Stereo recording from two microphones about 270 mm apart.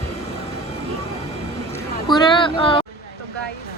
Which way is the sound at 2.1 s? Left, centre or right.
Centre.